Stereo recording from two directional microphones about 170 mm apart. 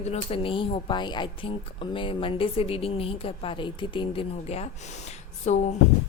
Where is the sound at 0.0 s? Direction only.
35° left (ahead or behind).